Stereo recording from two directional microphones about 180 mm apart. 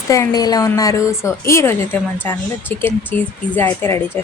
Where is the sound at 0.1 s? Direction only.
20° left (ahead or behind).